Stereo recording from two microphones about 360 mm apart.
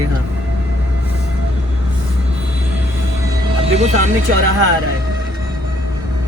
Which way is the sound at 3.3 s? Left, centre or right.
Centre.